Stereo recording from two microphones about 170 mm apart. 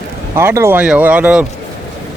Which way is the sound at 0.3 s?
15° right (ahead or behind).